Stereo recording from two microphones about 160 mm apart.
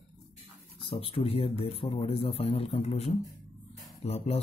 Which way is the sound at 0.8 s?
35° left (ahead or behind).